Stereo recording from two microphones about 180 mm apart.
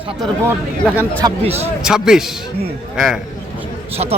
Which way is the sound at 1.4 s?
35° right (ahead or behind).